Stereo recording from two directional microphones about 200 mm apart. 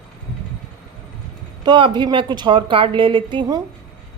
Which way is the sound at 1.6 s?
20° right (ahead or behind).